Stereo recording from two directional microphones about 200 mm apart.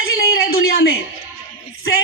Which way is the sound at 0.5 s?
50° left (ahead or behind).